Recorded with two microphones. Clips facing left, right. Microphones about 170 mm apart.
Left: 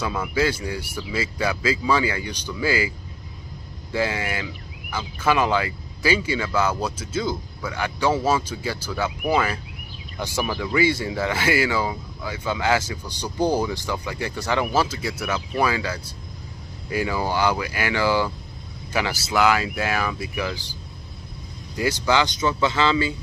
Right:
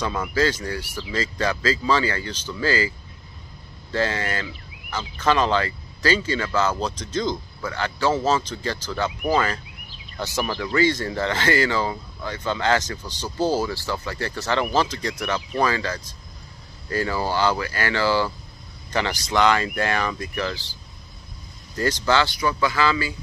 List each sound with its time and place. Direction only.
0.0 s speech: 10° left (ahead or behind)
3.9 s speech: 10° left (ahead or behind)
21.7 s speech: 10° left (ahead or behind)